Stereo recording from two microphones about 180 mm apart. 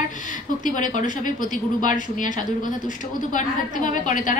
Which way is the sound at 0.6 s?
45° left (ahead or behind).